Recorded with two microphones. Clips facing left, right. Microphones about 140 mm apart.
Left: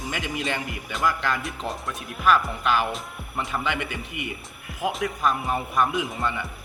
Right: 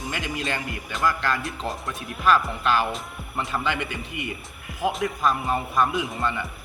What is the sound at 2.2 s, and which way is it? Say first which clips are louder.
Speech: even; 10° left (ahead or behind).